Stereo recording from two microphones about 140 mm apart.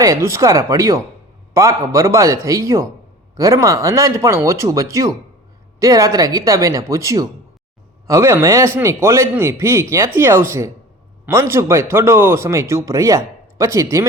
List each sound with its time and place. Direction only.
0.0 s speech: 20° right (ahead or behind)